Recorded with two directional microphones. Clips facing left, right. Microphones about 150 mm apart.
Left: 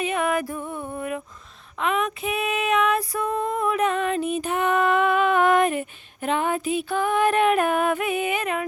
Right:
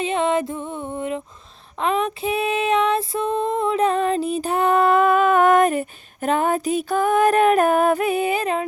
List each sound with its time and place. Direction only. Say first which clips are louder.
0.0 s music: right 3 dB; 25° right (ahead or behind)
1.8 s female singing: right 3 dB; 30° right (ahead or behind)